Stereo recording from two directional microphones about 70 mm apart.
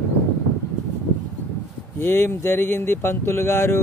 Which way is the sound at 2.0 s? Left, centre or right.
Left.